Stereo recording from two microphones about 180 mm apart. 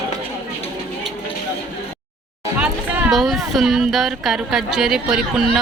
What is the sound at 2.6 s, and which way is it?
Speech, 5° right (ahead or behind).